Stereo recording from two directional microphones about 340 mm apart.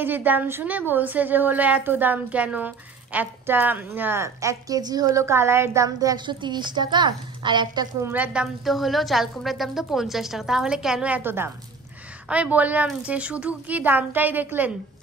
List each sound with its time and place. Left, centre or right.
0.0 s a woman's voice: centre